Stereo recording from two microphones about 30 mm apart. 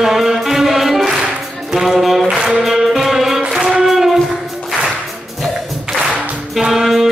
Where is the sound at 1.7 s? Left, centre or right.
Centre.